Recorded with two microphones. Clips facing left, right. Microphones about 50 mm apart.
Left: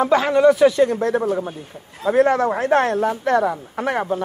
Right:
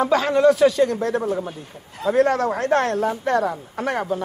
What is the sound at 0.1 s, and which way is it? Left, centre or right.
Speech, centre.